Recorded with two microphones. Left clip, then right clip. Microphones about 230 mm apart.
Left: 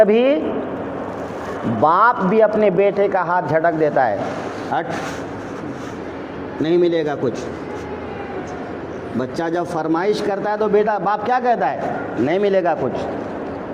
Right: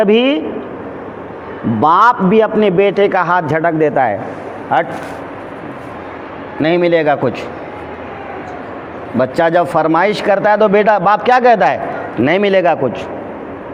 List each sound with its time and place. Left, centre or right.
0.0 s a man's voice: right
1.8 s a man's voice: right
6.6 s a man's voice: right
9.1 s a man's voice: right